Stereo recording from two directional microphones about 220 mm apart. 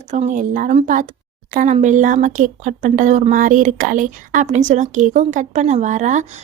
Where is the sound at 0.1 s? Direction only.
35° right (ahead or behind).